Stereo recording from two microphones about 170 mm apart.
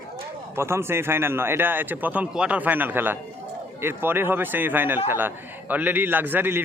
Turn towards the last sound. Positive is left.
turn(degrees=-10)  # may be behind; listen again after turning